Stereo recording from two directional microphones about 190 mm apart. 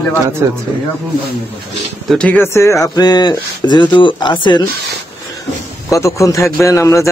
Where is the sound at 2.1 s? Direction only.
5° left (ahead or behind); by 4.6 s 25° left (ahead or behind).